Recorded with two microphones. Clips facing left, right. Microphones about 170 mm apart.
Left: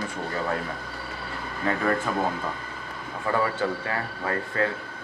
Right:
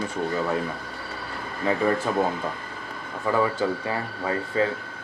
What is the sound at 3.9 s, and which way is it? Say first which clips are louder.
Speech: right 2 dB; 15° right (ahead or behind).